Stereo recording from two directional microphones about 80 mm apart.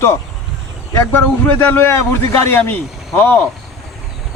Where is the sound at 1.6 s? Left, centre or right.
Left.